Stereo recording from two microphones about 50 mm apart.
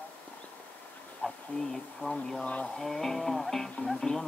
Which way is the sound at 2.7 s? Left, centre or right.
Centre.